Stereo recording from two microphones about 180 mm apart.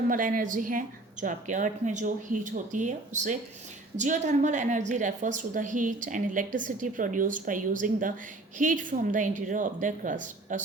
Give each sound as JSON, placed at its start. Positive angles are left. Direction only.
{"t": 0.1, "sound": "a woman's voice", "side_deg": -50}